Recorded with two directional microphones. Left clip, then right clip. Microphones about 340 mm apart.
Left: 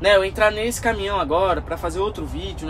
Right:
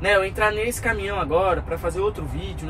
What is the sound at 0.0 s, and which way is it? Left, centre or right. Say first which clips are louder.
Speech: left 3 dB; centre.